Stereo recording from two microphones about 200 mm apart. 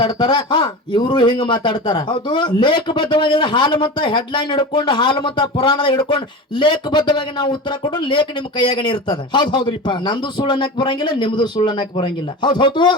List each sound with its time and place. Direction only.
0.0 s a man's voice: 25° left (ahead or behind)